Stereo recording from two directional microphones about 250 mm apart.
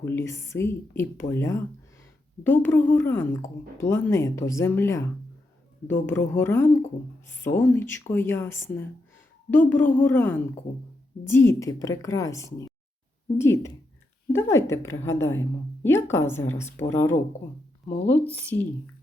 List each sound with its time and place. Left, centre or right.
0.0 s a woman's voice: centre
17.8 s speech: left
18.1 s a woman's voice: centre